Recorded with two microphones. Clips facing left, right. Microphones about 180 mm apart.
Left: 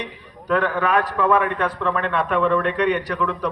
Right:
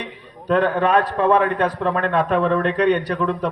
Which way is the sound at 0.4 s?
30° right (ahead or behind).